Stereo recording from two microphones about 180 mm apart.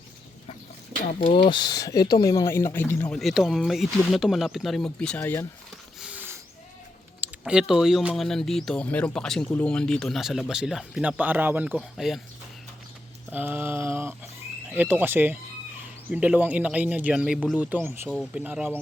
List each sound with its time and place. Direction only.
1.3 s speech: 25° left (ahead or behind)
6.0 s a sound: 10° right (ahead or behind)
7.2 s speech: 5° right (ahead or behind)
13.3 s speech: 10° right (ahead or behind)